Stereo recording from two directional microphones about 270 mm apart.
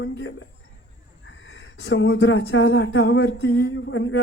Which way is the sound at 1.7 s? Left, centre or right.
Left.